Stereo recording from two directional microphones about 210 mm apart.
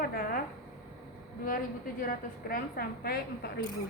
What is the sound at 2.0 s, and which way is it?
A woman's voice, 45° left (ahead or behind).